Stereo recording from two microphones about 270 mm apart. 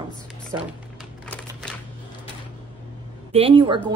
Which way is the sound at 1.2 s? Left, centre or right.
Centre.